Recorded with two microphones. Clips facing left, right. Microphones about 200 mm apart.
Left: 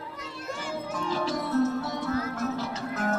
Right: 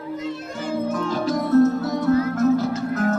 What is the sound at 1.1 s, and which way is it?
Music, 45° right (ahead or behind).